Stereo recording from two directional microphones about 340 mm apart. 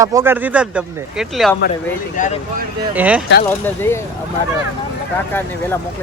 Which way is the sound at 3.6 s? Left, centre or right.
Centre.